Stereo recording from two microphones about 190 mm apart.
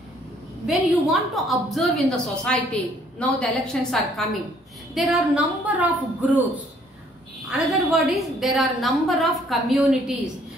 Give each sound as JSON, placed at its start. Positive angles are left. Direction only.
{"t": 0.7, "sound": "a woman's voice", "side_deg": 0}